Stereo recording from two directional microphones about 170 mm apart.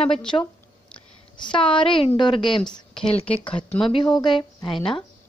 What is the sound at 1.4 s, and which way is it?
A woman's voice, 30° left (ahead or behind).